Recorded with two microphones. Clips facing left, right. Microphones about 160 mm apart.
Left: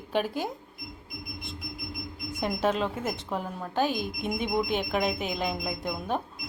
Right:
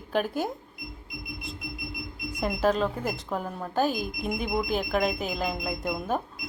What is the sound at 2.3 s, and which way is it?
A woman's voice, centre (ahead or behind).